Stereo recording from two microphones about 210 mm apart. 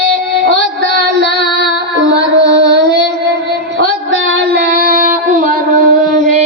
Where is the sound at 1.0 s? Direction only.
55° right (ahead or behind).